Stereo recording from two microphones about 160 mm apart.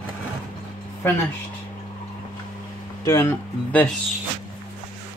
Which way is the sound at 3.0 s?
15° left (ahead or behind).